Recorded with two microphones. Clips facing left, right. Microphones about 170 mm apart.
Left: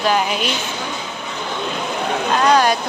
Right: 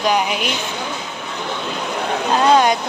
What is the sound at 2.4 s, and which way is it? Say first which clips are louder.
Speech: right 1 dB; 20° right (ahead or behind).